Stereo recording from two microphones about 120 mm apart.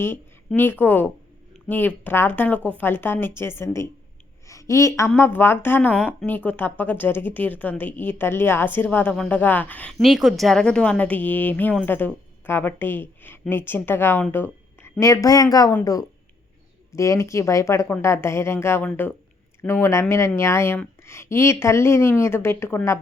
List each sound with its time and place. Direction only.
0.0 s a woman's voice: 20° left (ahead or behind)
10.0 s a woman's voice: centre (ahead or behind); by 23.0 s 20° left (ahead or behind)